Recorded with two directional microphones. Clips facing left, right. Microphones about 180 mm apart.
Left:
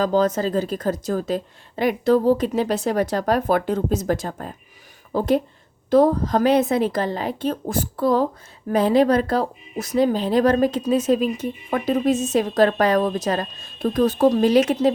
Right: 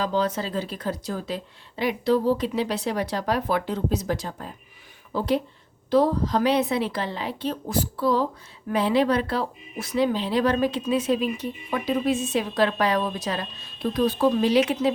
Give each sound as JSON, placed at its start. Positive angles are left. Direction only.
{"t": 0.0, "sound": "speech", "side_deg": 45}